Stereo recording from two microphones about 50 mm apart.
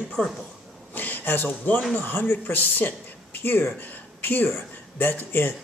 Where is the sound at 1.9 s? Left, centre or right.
Left.